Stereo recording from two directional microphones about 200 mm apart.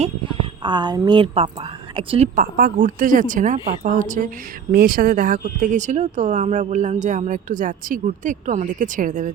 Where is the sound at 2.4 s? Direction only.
45° right (ahead or behind).